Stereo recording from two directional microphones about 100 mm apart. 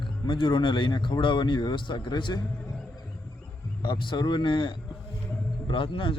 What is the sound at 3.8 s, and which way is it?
A man's voice, 50° left (ahead or behind).